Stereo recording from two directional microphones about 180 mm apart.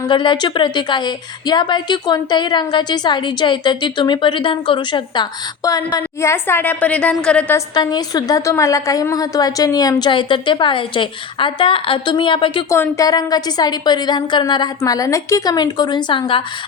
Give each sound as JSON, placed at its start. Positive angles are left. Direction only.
{"t": 0.1, "sound": "a woman's voice", "side_deg": 25}
{"t": 7.7, "sound": "a woman's voice", "side_deg": 25}
{"t": 12.7, "sound": "a woman's voice", "side_deg": 15}